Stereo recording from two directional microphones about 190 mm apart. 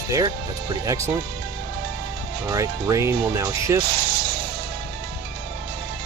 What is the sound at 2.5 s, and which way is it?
Speech, 15° right (ahead or behind).